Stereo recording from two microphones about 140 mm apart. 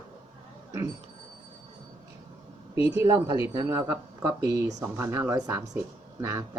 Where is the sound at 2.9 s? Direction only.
25° right (ahead or behind).